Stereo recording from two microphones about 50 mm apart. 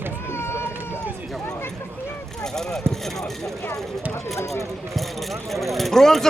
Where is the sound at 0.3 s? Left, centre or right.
Left.